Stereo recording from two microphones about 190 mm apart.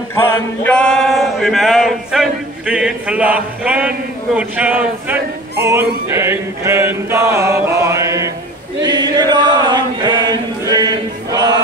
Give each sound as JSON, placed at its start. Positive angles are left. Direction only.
{"t": 0.1, "sound": "male singing", "side_deg": 10}
{"t": 8.8, "sound": "chant", "side_deg": -20}